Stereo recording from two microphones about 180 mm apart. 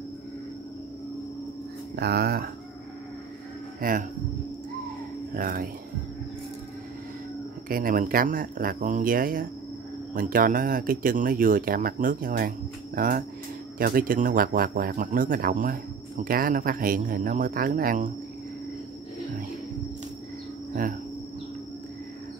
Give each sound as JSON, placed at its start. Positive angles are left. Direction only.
{"t": 2.0, "sound": "speech", "side_deg": -60}
{"t": 3.8, "sound": "speech", "side_deg": -50}
{"t": 5.3, "sound": "speech", "side_deg": -50}
{"t": 7.6, "sound": "speech", "side_deg": -50}